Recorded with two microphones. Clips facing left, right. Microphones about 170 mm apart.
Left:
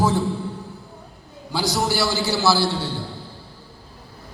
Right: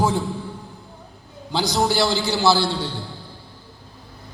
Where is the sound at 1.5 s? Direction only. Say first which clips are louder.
Right 2 dB; 20° right (ahead or behind).